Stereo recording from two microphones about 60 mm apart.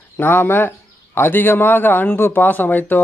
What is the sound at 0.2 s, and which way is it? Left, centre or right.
Speech, left.